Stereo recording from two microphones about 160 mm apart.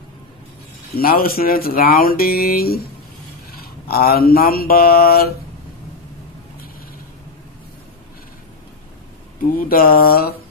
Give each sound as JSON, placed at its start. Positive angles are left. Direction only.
{"t": 0.9, "sound": "speech", "side_deg": 65}
{"t": 9.4, "sound": "speech", "side_deg": 60}